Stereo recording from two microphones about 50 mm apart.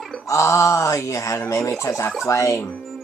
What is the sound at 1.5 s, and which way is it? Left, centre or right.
Speech, left.